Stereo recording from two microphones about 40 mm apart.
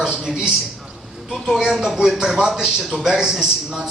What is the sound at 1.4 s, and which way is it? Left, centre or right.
A man's voice, centre.